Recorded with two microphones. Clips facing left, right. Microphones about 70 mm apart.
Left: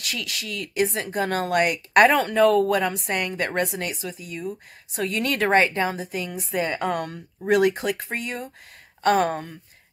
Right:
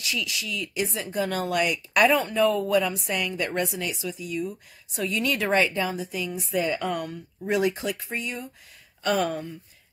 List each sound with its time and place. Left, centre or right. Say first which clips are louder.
0.0 s a woman's voice: right 1 dB; left
6.9 s a woman's voice: left 3 dB; left